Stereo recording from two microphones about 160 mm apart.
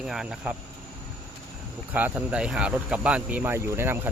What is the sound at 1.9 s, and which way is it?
Speech, 10° right (ahead or behind).